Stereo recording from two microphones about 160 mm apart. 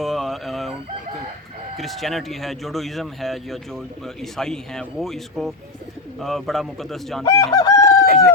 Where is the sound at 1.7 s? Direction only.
Centre (ahead or behind).